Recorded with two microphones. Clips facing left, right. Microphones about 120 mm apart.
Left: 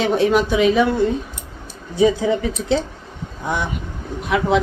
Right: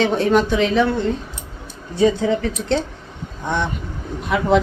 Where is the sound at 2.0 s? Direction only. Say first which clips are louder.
Even; 10° left (ahead or behind).